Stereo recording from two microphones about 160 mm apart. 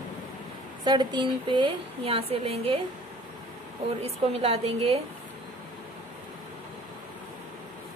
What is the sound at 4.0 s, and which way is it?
A woman's voice, 40° right (ahead or behind).